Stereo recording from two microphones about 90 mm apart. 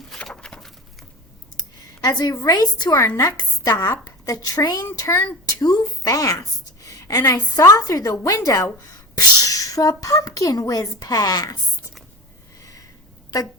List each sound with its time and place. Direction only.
0.3 s patter: 5° left (ahead or behind)
2.0 s a woman's voice: 45° left (ahead or behind)
9.1 s a sound: 40° left (ahead or behind)
10.0 s speech: 40° left (ahead or behind)